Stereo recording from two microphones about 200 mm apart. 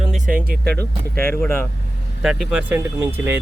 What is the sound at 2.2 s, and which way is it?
Speech, 5° right (ahead or behind).